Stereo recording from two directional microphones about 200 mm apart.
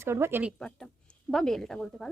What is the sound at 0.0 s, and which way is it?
Speech, 10° right (ahead or behind).